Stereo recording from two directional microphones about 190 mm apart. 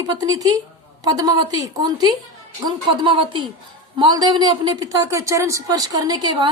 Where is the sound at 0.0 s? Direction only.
20° right (ahead or behind).